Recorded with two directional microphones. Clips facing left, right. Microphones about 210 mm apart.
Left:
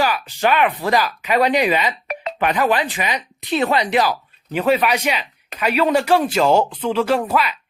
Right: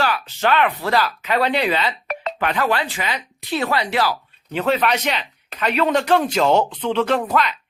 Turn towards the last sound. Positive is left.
turn(degrees=10)  # may be behind; listen again after turning